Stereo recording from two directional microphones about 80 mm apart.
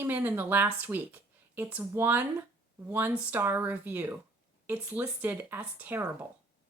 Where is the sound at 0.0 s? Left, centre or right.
Right.